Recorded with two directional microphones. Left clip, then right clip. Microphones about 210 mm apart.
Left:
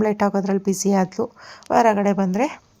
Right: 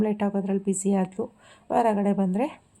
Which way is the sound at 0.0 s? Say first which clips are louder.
Left 7 dB; 20° left (ahead or behind).